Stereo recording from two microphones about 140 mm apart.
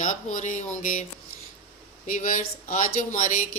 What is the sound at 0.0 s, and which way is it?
Speech, 65° left (ahead or behind).